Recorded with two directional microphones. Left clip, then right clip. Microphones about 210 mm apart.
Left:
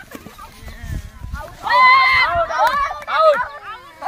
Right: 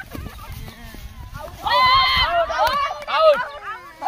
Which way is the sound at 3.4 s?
35° right (ahead or behind).